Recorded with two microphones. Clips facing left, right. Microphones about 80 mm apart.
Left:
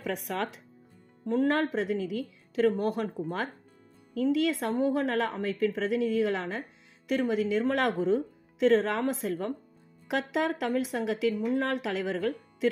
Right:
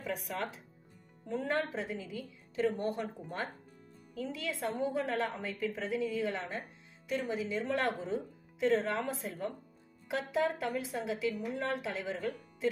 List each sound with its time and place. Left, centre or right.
0.0 s speech: left
1.2 s a woman's voice: left
7.1 s speech: left